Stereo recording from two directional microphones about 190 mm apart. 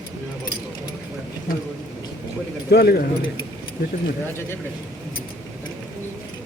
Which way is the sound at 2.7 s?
55° left (ahead or behind).